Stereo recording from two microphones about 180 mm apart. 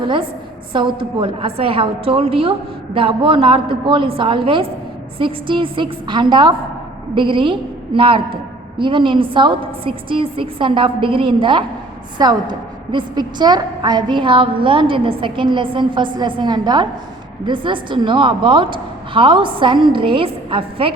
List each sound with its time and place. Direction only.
0.0 s a woman's voice: 25° right (ahead or behind)